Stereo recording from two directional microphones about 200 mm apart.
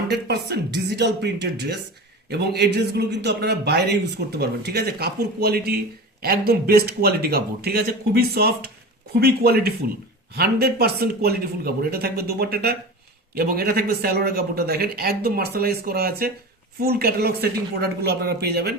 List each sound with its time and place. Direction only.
0.1 s a man's voice: 55° right (ahead or behind)